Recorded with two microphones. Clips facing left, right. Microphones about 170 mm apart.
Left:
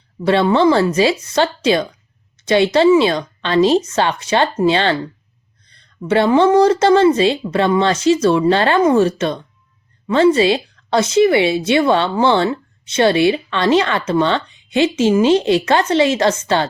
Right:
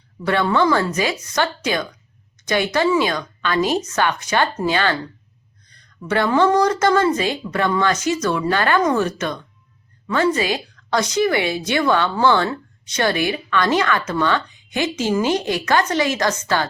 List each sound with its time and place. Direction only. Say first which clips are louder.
0.3 s a woman's voice: left 5 dB; 25° left (ahead or behind)
5.6 s a sound: left 1 dB; 25° left (ahead or behind)
6.1 s a woman's voice: left 4 dB; 25° left (ahead or behind)